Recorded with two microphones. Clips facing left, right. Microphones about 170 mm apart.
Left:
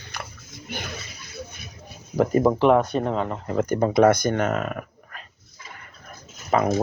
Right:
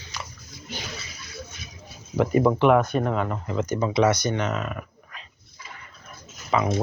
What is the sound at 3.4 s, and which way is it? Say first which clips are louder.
Speech: left 3 dB; 50° left (ahead or behind).